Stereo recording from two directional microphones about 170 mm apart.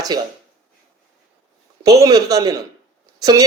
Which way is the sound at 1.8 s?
20° right (ahead or behind).